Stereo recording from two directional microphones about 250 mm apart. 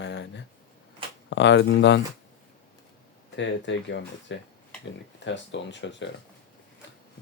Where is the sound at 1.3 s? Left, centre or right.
Left.